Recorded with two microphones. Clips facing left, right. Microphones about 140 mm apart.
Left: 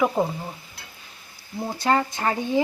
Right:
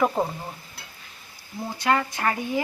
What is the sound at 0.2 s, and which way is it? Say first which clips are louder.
Stir: left 2 dB; centre (ahead or behind).